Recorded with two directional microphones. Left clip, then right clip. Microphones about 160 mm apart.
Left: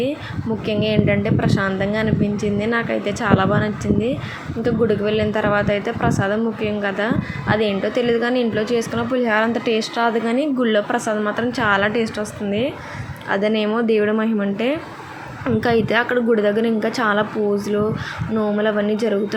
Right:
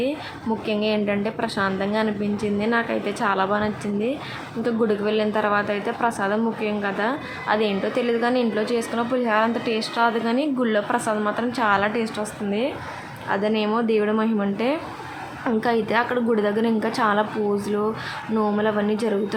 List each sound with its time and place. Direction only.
0.7 s a woman's voice: 10° left (ahead or behind)
18.3 s a woman's voice: 5° left (ahead or behind)